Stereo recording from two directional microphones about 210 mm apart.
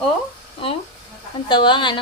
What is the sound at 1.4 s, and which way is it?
Speech, 20° left (ahead or behind).